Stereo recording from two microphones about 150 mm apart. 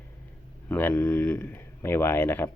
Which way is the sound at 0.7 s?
15° left (ahead or behind).